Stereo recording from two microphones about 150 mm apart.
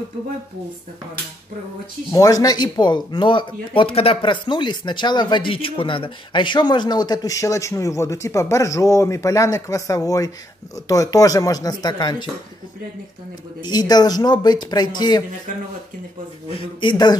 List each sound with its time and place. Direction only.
2.1 s speech: 25° left (ahead or behind)
13.6 s speech: 30° left (ahead or behind)
16.4 s a man's voice: 40° left (ahead or behind)
16.9 s speech: 25° left (ahead or behind)